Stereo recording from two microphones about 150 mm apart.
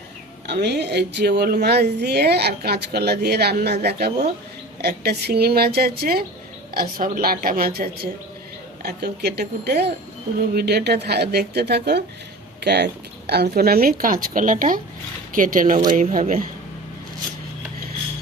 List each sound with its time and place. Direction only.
0.5 s speech: 90° right
6.7 s a woman's voice: 80° right; by 16.5 s 65° right (ahead or behind)